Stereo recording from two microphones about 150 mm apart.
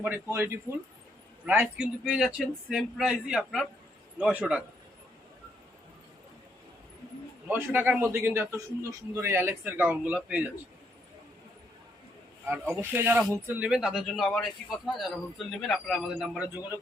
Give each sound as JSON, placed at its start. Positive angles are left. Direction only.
{"t": 0.0, "sound": "a man's voice", "side_deg": -15}
{"t": 7.4, "sound": "a man's voice", "side_deg": -15}
{"t": 12.7, "sound": "a man's voice", "side_deg": -15}